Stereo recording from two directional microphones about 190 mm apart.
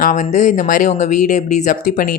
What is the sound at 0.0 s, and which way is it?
Speech, 40° left (ahead or behind).